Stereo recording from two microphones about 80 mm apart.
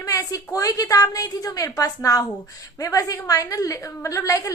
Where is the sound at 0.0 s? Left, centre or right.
Left.